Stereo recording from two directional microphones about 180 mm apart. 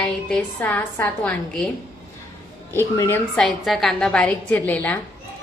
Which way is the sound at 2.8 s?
15° left (ahead or behind).